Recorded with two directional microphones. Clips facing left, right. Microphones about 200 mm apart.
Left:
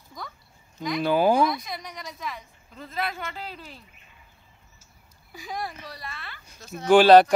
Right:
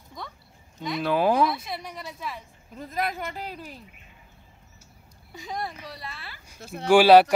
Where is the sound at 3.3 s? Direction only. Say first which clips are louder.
Right 2 dB; 45° right (ahead or behind).